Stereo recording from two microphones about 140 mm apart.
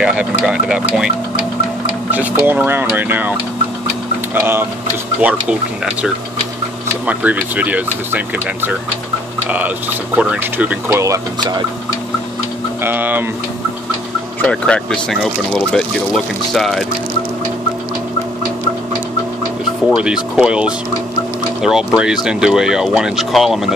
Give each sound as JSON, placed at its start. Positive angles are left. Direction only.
{"t": 0.0, "sound": "speech", "side_deg": -5}
{"t": 10.1, "sound": "speech", "side_deg": -10}
{"t": 10.9, "sound": "speech", "side_deg": -20}
{"t": 12.8, "sound": "speech", "side_deg": -15}
{"t": 14.4, "sound": "speech", "side_deg": 5}
{"t": 19.9, "sound": "speech", "side_deg": -5}